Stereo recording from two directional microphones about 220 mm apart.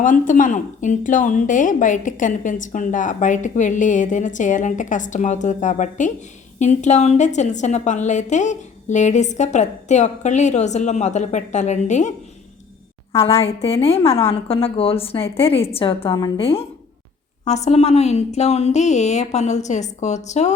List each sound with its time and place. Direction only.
0.0 s a woman's voice: 35° left (ahead or behind)
13.1 s a woman's voice: 25° left (ahead or behind)